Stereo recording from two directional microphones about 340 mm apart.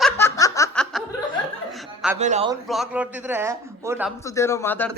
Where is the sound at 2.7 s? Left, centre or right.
Centre.